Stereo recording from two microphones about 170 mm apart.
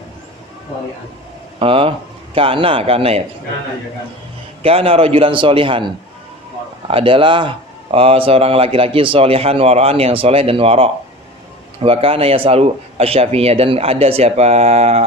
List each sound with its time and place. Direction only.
1.5 s speech: 30° right (ahead or behind)
4.6 s speech: 35° right (ahead or behind)